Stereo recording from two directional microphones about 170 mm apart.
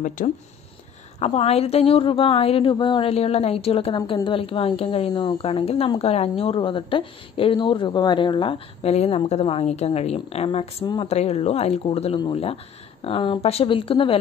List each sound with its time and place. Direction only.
0.2 s speech: 50° left (ahead or behind)
1.2 s a woman's voice: 35° left (ahead or behind)